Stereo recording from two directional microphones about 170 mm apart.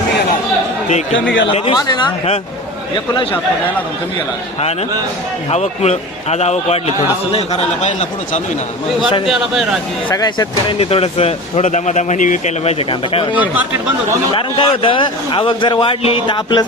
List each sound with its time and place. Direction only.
1.1 s speech: 90° left
1.5 s speech: 30° left (ahead or behind)
5.5 s speech: 40° left (ahead or behind)
9.2 s a man's voice: centre (ahead or behind)
10.1 s speech: 25° left (ahead or behind)
13.3 s speech: 10° right (ahead or behind)
14.3 s a man's voice: 30° left (ahead or behind)